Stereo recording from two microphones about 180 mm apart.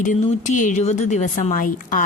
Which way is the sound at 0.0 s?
45° left (ahead or behind).